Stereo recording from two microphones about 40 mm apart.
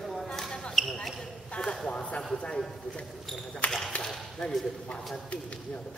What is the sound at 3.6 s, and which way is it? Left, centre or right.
Speech, left.